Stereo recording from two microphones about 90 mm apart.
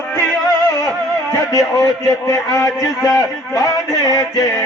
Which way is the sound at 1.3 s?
40° left (ahead or behind).